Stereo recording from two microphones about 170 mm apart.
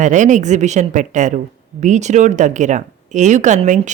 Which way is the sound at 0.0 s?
45° right (ahead or behind).